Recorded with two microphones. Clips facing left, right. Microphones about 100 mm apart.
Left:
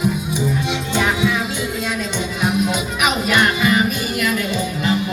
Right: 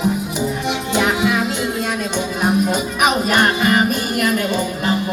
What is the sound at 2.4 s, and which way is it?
Music, 40° right (ahead or behind).